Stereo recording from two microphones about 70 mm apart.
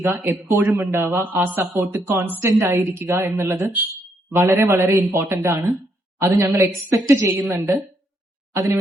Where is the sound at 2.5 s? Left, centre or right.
Right.